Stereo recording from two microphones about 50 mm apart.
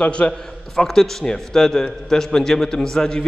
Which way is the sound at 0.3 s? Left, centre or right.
Centre.